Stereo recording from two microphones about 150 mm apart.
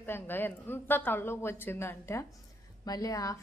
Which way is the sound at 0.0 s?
15° left (ahead or behind).